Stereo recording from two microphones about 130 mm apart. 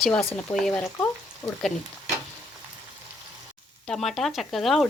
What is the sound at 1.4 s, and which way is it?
Speech, 25° left (ahead or behind).